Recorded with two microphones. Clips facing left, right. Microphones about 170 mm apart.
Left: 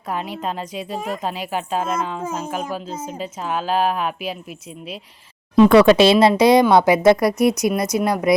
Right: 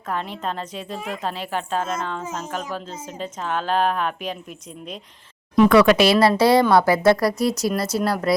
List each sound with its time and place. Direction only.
0.1 s a woman's voice: 10° left (ahead or behind)
0.9 s speech: 40° left (ahead or behind)
1.2 s a woman's voice: 10° left (ahead or behind)
5.5 s speech: 25° left (ahead or behind)